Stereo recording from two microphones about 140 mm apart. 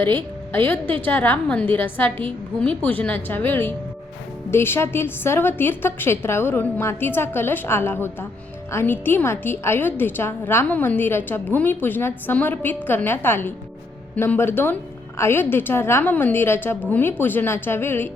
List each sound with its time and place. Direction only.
0.5 s a woman's voice: 15° left (ahead or behind)